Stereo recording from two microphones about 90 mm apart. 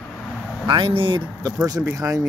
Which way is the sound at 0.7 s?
75° right (ahead or behind).